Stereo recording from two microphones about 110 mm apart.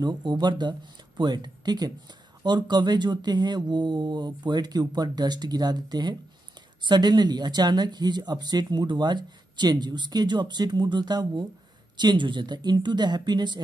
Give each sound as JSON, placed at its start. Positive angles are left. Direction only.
{"t": 0.0, "sound": "speech", "side_deg": -40}